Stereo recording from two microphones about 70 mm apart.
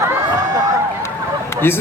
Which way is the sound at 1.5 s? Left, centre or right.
Left.